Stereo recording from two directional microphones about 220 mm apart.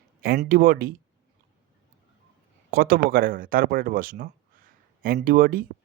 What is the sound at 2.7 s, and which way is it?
Speech, 40° right (ahead or behind).